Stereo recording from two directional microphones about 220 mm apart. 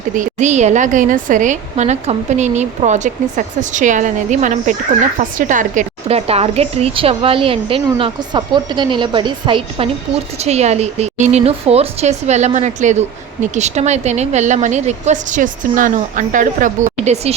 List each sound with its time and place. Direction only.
0.1 s a woman's voice: 35° right (ahead or behind)